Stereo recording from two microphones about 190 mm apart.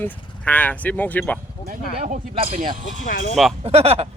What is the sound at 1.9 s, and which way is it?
Speech, 40° right (ahead or behind).